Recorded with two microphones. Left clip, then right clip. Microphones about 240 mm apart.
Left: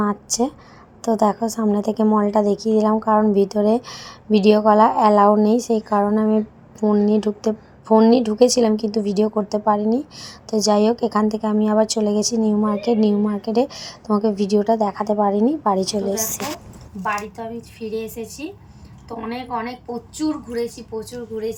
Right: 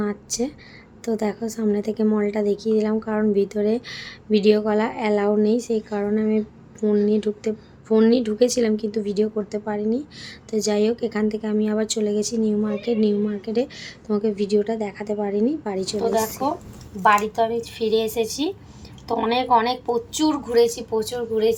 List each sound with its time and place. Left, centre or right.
0.0 s a woman's voice: centre
17.0 s a woman's voice: right
21.0 s a woman's voice: right